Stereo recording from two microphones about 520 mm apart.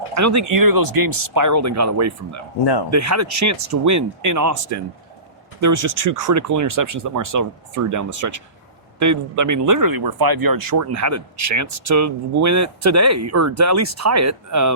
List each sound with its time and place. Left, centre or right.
0.1 s speech: right